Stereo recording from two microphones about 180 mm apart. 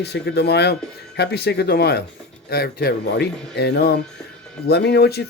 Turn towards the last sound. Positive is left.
turn(degrees=65)  # may be behind; listen again after turning